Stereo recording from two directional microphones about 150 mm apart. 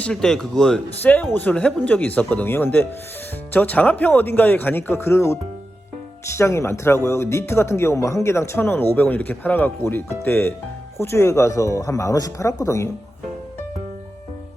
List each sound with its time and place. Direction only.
0.0 s speech: 5° left (ahead or behind)